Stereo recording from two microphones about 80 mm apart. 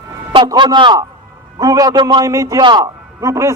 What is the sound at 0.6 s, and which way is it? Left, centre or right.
Speech, right.